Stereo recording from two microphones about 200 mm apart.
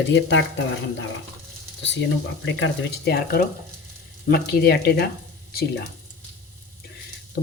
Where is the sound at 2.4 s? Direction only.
60° left (ahead or behind).